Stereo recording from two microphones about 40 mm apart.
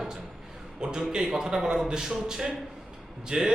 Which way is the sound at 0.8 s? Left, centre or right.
Right.